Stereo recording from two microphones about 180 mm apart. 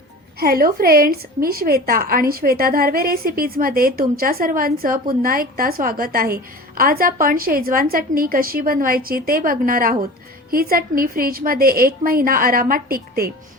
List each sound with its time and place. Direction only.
0.3 s a woman's voice: 55° right (ahead or behind)